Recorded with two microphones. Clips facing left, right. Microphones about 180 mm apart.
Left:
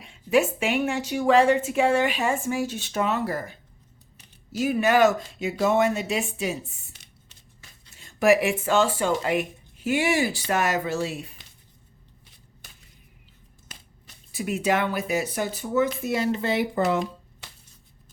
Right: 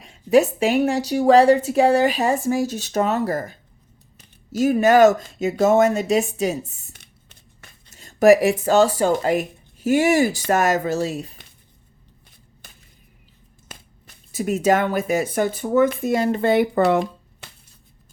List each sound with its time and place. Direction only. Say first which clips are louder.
0.0 s speech: right 5 dB; 40° right (ahead or behind); by 7.9 s 55° right (ahead or behind)
7.9 s speech: right 6 dB; 40° right (ahead or behind)
14.3 s speech: right 6 dB; 40° right (ahead or behind); by 17.1 s 60° right (ahead or behind)